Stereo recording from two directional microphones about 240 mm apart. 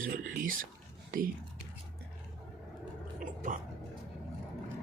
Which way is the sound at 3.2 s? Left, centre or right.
Right.